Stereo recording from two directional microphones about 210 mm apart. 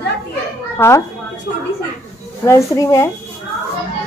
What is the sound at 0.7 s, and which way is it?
Speech, 10° left (ahead or behind).